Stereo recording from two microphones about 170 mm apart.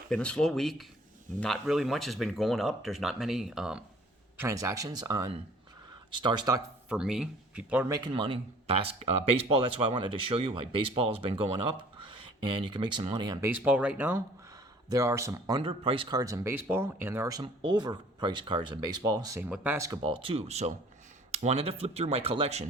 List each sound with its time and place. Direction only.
0.1 s speech: 5° left (ahead or behind)
4.4 s speech: 15° right (ahead or behind)
6.8 s speech: 5° right (ahead or behind)
7.9 s speech: 25° right (ahead or behind)
13.5 s speech: 10° right (ahead or behind)
17.4 s speech: 25° right (ahead or behind)
20.0 s speech: 35° right (ahead or behind)